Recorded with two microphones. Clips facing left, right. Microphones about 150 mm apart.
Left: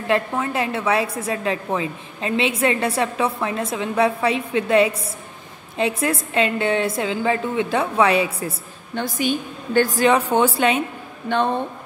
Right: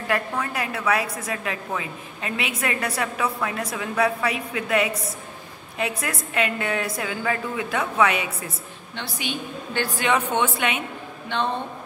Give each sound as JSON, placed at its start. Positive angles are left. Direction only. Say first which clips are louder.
{"t": 0.1, "sound": "a woman's voice", "louder": "left 5 dB", "side_deg": 25}
{"t": 8.9, "sound": "a woman's voice", "louder": "left 9 dB", "side_deg": 45}
{"t": 11.3, "sound": "speech", "louder": "left 6 dB", "side_deg": 45}